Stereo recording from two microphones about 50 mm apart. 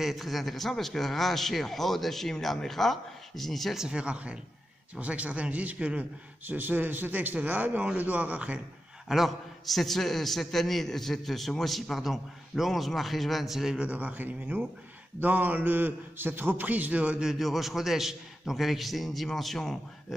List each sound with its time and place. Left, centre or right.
0.0 s a man's voice: centre
3.9 s speech: right
6.4 s a man's voice: right
9.1 s a man's voice: centre
13.7 s a man's voice: right
17.2 s a man's voice: centre